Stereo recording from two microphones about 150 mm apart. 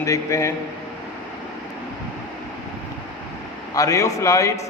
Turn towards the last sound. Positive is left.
turn(degrees=20)  # may be behind; listen again after turning